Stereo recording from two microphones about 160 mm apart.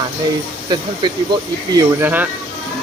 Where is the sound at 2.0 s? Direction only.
10° right (ahead or behind).